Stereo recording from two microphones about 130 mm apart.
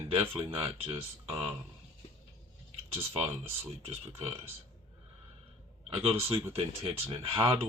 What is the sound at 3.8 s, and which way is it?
Speech, 50° right (ahead or behind).